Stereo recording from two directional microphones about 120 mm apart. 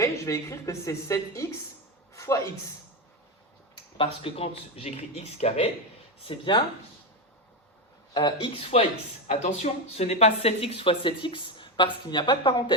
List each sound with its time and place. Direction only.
0.0 s a woman's voice: 25° left (ahead or behind)
2.1 s a sound: 25° left (ahead or behind)
3.9 s speech: 50° left (ahead or behind)
6.2 s speech: 45° left (ahead or behind)
8.1 s speech: 35° left (ahead or behind)
8.7 s speech: 60° left (ahead or behind); by 12.7 s 40° left (ahead or behind)